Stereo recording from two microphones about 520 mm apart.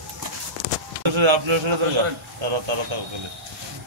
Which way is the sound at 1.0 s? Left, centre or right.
Right.